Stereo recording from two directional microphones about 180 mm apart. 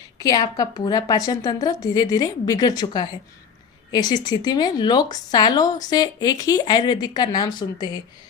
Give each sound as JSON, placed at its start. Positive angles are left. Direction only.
{"t": 0.2, "sound": "a woman's voice", "side_deg": 20}